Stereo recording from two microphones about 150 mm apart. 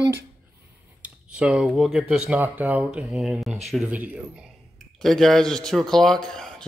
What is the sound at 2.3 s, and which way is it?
A man's voice, 10° right (ahead or behind).